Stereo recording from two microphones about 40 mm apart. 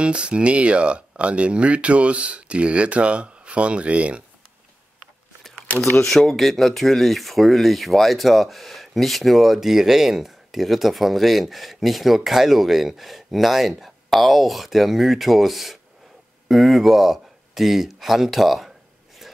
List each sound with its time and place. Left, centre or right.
0.0 s speech: right
6.0 s speech: centre